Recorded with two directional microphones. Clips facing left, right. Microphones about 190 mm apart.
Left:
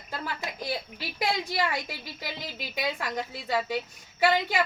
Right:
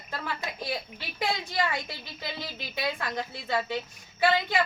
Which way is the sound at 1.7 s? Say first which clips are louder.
Left 1 dB; 15° left (ahead or behind).